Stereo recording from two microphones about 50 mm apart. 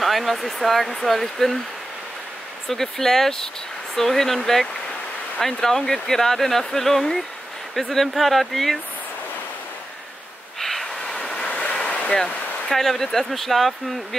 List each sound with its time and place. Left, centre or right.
0.0 s speech: centre
2.7 s speech: centre
10.6 s a sound: centre
11.3 s waves: left
12.6 s speech: centre